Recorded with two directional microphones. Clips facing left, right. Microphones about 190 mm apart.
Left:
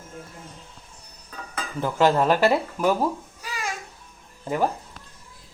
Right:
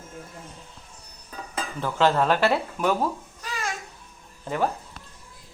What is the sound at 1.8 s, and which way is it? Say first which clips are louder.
Speech: left 2 dB; 10° left (ahead or behind).